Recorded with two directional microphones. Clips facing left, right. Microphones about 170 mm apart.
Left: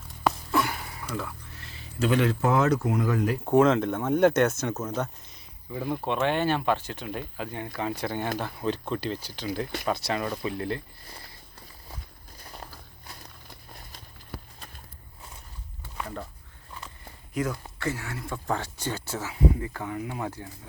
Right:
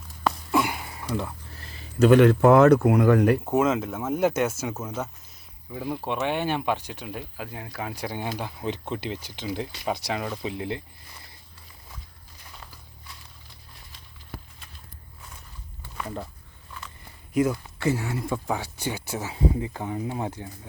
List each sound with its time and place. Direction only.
0.5 s a sound: 15° right (ahead or behind)
1.2 s speech: 40° right (ahead or behind); by 3.3 s 65° right (ahead or behind)
3.4 s speech: 5° right (ahead or behind)
13.1 s a sound: 45° left (ahead or behind)
17.3 s speech: 15° right (ahead or behind)
17.9 s speech: 25° right (ahead or behind)
18.3 s speech: 10° right (ahead or behind)